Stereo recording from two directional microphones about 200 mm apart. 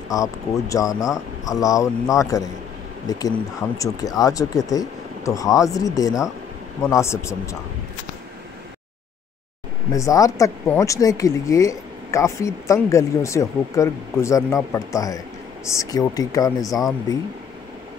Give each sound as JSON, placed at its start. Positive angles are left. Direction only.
{"t": 0.1, "sound": "speech", "side_deg": 15}
{"t": 9.9, "sound": "speech", "side_deg": 15}